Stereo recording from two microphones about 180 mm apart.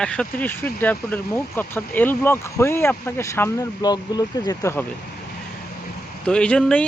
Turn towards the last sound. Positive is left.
turn(degrees=5)  # may be behind; listen again after turning